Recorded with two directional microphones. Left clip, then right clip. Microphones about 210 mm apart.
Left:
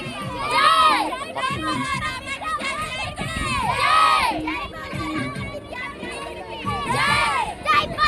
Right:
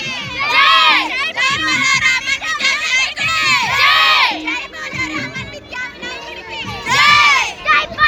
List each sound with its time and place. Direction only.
0.4 s crowd: 30° left (ahead or behind)
1.4 s music: 35° left (ahead or behind)
6.8 s crowd: 30° left (ahead or behind)
7.7 s music: 55° left (ahead or behind)